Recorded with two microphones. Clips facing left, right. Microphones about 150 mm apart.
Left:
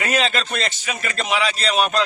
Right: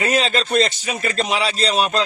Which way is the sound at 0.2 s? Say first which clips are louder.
Right 4 dB; 35° right (ahead or behind).